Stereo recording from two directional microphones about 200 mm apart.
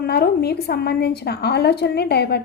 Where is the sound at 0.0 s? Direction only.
55° left (ahead or behind).